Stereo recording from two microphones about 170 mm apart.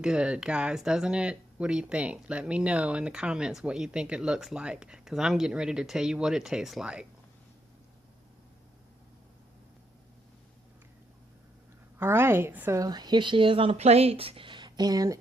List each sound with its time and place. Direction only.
0.0 s speech: 5° right (ahead or behind)
11.9 s a woman's voice: 15° right (ahead or behind)